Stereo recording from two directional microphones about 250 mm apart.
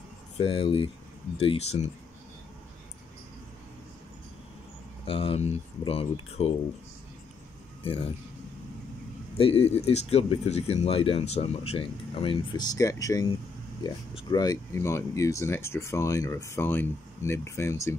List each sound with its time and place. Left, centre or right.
0.4 s speech: left
5.0 s speech: left
9.4 s speech: left